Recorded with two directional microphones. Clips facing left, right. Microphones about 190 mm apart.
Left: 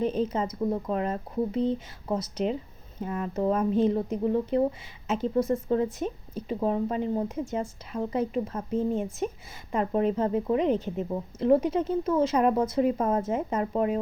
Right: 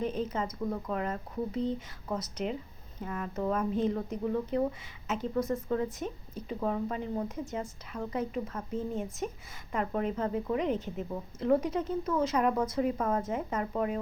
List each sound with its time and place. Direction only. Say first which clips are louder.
0.0 s speech: left 5 dB; 25° left (ahead or behind)